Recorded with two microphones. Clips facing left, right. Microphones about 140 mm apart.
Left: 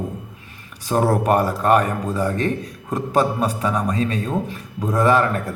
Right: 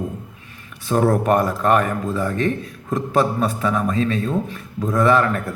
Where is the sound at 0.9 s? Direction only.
35° left (ahead or behind).